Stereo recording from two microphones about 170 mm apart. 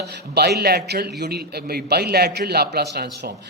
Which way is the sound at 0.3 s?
70° right (ahead or behind).